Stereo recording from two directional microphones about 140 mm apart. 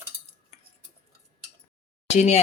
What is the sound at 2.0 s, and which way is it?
Speech, 50° left (ahead or behind).